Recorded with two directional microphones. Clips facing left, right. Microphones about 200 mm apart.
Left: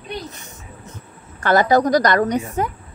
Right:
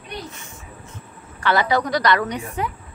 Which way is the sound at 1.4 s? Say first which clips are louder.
Left 5 dB; 45° left (ahead or behind).